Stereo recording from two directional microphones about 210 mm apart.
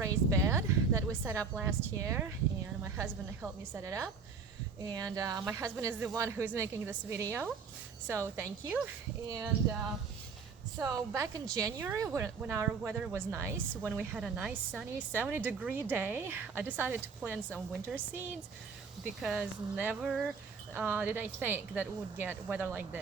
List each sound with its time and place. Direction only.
0.0 s a sound: 15° right (ahead or behind)
1.5 s speech: 10° right (ahead or behind)
9.5 s speech: 45° right (ahead or behind)
10.8 s speech: 15° right (ahead or behind)